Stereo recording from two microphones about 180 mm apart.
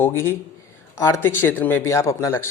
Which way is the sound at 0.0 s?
10° left (ahead or behind).